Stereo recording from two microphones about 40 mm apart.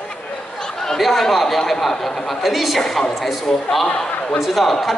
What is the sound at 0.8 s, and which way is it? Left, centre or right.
Speech, centre.